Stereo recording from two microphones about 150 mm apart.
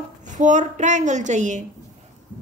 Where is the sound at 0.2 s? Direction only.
55° right (ahead or behind).